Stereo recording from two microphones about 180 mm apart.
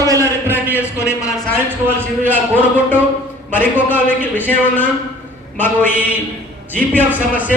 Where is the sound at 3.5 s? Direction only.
10° left (ahead or behind).